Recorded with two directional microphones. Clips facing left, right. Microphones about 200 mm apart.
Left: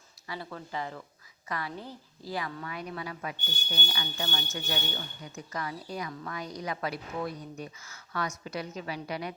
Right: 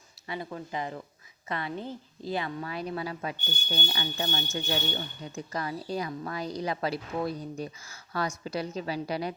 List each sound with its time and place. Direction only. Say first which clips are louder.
0.3 s a woman's voice: right 3 dB; 15° right (ahead or behind); by 9.3 s 35° right (ahead or behind)